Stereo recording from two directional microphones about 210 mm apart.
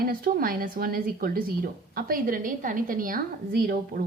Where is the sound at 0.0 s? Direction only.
45° right (ahead or behind).